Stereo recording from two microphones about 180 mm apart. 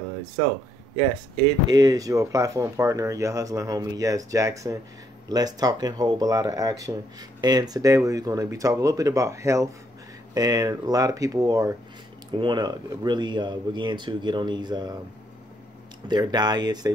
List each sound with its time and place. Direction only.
1.7 s speech: 20° right (ahead or behind)
16.1 s speech: 25° right (ahead or behind)